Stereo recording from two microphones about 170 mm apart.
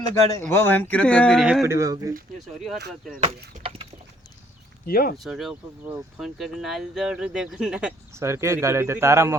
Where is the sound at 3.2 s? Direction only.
35° right (ahead or behind).